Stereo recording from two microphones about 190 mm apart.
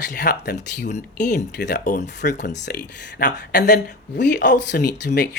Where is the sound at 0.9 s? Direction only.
40° left (ahead or behind).